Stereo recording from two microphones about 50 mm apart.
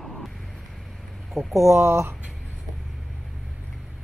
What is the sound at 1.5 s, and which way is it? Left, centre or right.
Speech, right.